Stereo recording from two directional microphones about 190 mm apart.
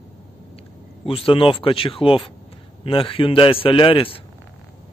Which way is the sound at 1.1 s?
30° left (ahead or behind).